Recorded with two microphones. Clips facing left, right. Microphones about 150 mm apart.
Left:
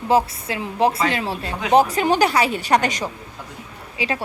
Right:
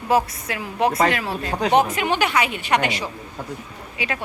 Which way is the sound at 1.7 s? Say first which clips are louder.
Left 4 dB; 35° left (ahead or behind).